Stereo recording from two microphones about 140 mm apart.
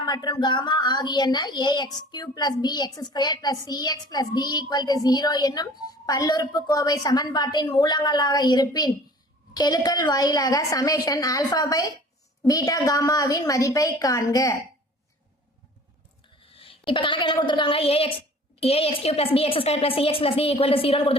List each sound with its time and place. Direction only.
0.0 s speech: 30° left (ahead or behind)
16.6 s a woman's voice: 40° left (ahead or behind)